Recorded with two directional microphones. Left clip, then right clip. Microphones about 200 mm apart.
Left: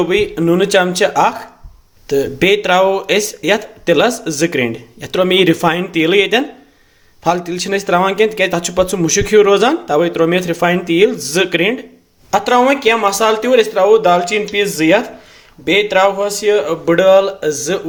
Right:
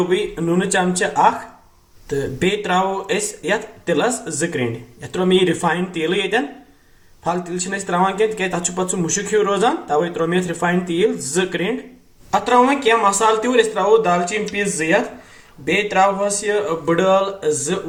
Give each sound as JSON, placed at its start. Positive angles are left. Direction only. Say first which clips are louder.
{"t": 0.3, "sound": "speech", "louder": "left 7 dB", "side_deg": 50}
{"t": 2.6, "sound": "speech", "louder": "left 7 dB", "side_deg": 60}